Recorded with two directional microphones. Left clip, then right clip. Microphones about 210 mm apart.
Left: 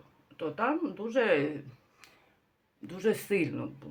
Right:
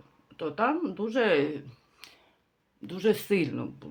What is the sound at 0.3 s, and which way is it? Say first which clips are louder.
Speech: right 3 dB; 35° right (ahead or behind).